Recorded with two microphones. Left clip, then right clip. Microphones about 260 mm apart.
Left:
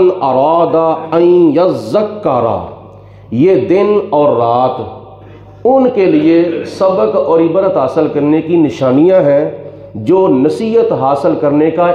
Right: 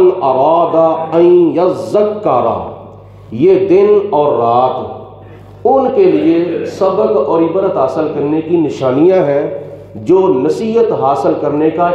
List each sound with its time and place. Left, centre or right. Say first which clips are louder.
0.2 s a man's voice: even; left
5.7 s a man's voice: even; left